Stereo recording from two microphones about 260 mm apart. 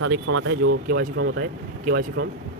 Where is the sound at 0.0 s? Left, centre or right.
Right.